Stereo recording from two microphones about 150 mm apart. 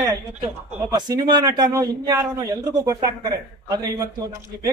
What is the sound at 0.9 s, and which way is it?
Speech, 25° right (ahead or behind).